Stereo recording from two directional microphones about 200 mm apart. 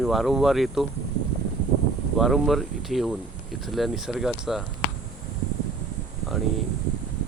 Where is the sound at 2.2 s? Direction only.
Centre (ahead or behind).